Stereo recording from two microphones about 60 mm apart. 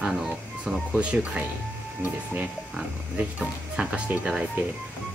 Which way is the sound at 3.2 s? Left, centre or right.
Right.